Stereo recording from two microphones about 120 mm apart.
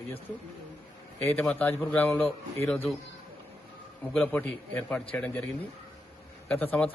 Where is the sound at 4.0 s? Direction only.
10° left (ahead or behind).